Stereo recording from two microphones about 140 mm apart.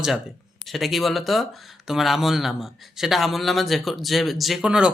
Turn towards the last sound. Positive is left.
turn(degrees=-5)  # may be behind; listen again after turning